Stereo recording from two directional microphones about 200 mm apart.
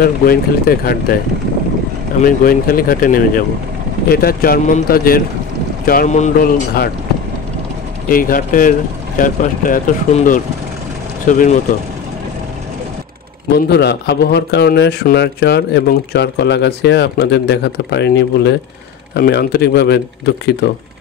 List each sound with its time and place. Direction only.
0.0 s speech: 45° left (ahead or behind)
2.2 s speech: 45° left (ahead or behind)
8.1 s speech: 45° left (ahead or behind)
13.7 s a man's voice: 55° left (ahead or behind)